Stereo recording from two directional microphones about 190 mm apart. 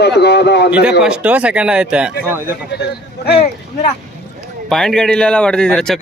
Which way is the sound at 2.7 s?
60° left (ahead or behind).